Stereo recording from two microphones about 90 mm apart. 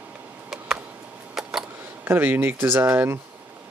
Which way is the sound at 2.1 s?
25° right (ahead or behind).